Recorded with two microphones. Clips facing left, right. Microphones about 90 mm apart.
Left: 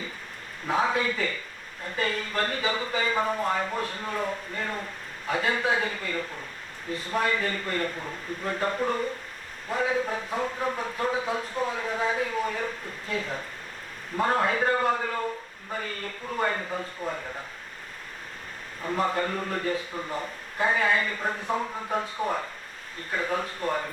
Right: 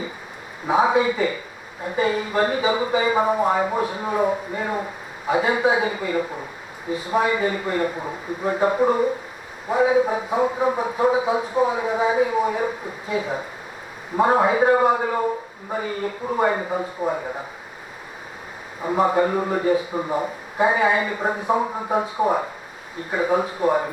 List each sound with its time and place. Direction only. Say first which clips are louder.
0.7 s speech: right 7 dB; 10° right (ahead or behind)
18.8 s speech: right 8 dB; 15° right (ahead or behind)
21.9 s speech: right 8 dB; 10° right (ahead or behind)